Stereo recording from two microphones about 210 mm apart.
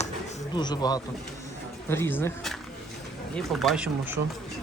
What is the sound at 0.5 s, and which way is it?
A man's voice, 20° left (ahead or behind).